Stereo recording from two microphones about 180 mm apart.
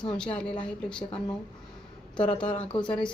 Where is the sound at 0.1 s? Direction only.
5° left (ahead or behind).